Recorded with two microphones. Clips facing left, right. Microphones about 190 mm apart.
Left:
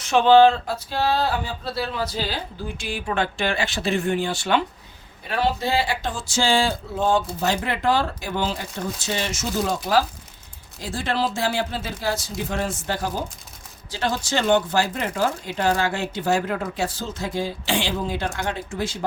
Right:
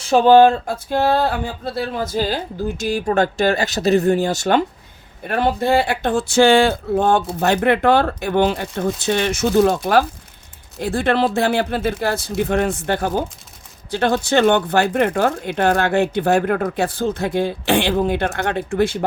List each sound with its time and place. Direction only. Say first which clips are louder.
0.0 s speech: right 4 dB; 35° right (ahead or behind)
0.3 s speech: right 3 dB; 45° right (ahead or behind)